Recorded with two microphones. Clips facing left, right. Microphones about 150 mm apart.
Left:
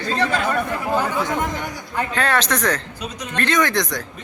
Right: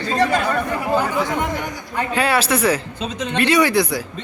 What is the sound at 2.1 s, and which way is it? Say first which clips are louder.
Speech: right 3 dB; 10° right (ahead or behind).